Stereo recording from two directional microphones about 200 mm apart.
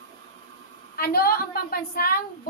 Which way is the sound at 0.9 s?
50° left (ahead or behind).